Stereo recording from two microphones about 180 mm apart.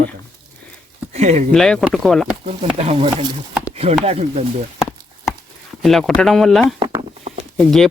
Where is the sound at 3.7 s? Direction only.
35° right (ahead or behind).